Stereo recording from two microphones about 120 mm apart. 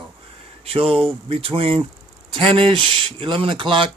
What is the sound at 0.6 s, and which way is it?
A man's voice, 55° right (ahead or behind).